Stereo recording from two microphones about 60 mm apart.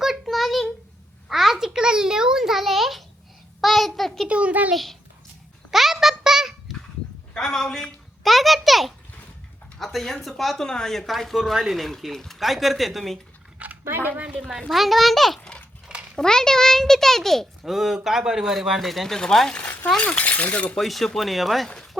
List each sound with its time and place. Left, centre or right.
0.0 s a sound: centre
1.3 s a child's voice: centre
4.3 s a child's voice: right
4.7 s speech: centre
5.7 s a sound: centre
7.3 s a child's voice: centre
13.6 s a sound: right
14.2 s a woman's voice: centre
14.7 s a child's voice: centre
19.6 s a sound: left
20.0 s speech: left
20.7 s speech: centre